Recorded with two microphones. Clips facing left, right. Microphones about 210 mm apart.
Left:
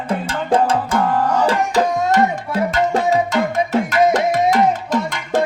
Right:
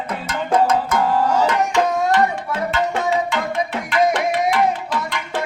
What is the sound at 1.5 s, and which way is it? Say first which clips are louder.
Tabla: left 1 dB; 40° left (ahead or behind).